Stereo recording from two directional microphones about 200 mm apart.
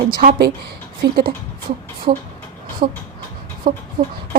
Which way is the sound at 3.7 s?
45° right (ahead or behind).